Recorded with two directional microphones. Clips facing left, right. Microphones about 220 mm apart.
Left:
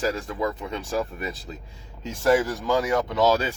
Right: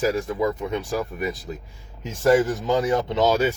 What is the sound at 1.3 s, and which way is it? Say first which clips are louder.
Speech: right 5 dB; 20° right (ahead or behind).